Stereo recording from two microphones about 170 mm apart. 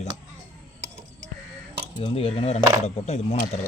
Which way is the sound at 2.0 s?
30° left (ahead or behind).